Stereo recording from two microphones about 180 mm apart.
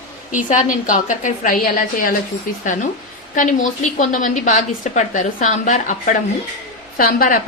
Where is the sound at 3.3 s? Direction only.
45° left (ahead or behind).